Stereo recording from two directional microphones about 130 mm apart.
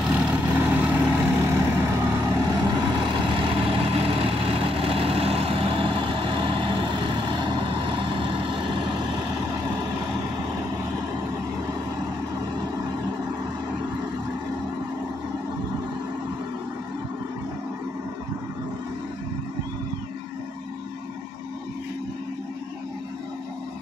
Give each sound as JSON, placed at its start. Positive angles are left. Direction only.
{"t": 0.0, "sound": "vehicle", "side_deg": -10}
{"t": 3.1, "sound": "vehicle", "side_deg": -40}